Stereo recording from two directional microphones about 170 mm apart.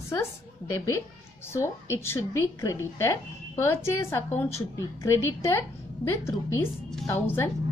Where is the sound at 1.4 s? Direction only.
15° left (ahead or behind).